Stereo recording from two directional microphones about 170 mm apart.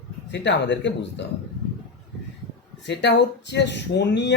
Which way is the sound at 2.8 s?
90° left.